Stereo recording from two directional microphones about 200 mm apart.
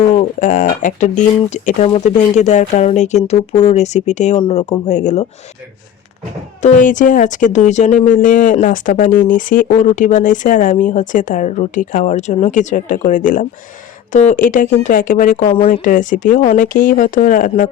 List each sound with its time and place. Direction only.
0.2 s speech: 40° left (ahead or behind)
4.4 s speech: 25° left (ahead or behind)
4.9 s speech: 35° left (ahead or behind)
6.6 s speech: 40° left (ahead or behind)